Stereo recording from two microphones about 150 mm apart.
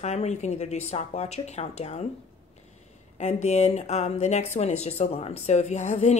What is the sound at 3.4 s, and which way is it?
Speech, 50° left (ahead or behind).